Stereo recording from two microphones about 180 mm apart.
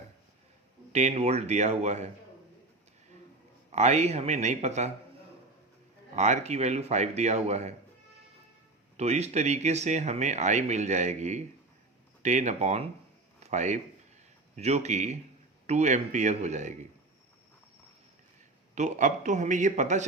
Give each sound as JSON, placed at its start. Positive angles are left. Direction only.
{"t": 0.9, "sound": "speech", "side_deg": -35}
{"t": 3.7, "sound": "speech", "side_deg": -40}
{"t": 6.1, "sound": "speech", "side_deg": -40}
{"t": 9.0, "sound": "speech", "side_deg": -40}
{"t": 13.4, "sound": "a sound", "side_deg": -40}
{"t": 14.5, "sound": "speech", "side_deg": -40}
{"t": 18.7, "sound": "a man's voice", "side_deg": -40}